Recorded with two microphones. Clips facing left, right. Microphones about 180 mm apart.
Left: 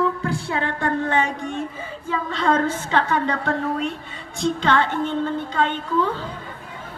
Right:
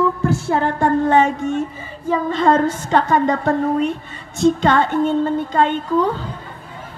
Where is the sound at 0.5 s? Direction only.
45° right (ahead or behind).